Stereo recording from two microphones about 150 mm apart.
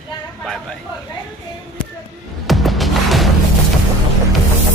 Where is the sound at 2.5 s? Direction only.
Centre (ahead or behind).